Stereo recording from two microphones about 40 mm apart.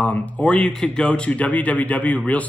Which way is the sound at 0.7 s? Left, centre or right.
Centre.